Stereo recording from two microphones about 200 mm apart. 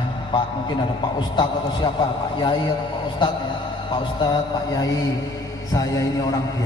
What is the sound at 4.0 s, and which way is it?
Speech, 20° left (ahead or behind).